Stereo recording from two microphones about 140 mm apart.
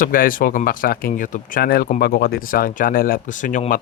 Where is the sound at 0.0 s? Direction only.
85° left; by 3.6 s 65° left (ahead or behind).